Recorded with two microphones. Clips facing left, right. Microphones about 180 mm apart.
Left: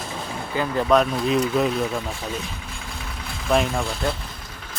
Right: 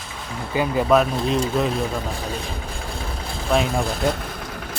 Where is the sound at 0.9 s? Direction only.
5° right (ahead or behind).